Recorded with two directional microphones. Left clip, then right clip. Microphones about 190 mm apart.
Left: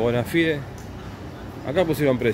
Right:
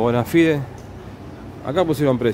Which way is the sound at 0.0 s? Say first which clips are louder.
Right 4 dB; 25° right (ahead or behind).